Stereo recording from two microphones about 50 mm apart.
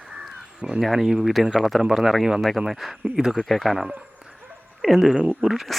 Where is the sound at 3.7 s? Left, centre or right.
Centre.